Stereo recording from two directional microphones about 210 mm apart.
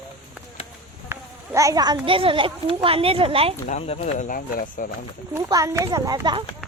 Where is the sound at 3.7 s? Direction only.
30° left (ahead or behind).